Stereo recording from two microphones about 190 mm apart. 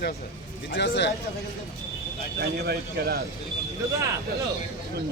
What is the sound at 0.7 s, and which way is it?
Speech, 75° left (ahead or behind).